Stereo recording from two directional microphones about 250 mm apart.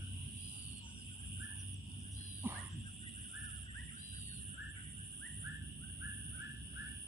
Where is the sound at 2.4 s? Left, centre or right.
Centre.